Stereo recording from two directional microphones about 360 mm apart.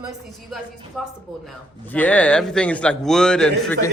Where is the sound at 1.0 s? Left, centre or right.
Centre.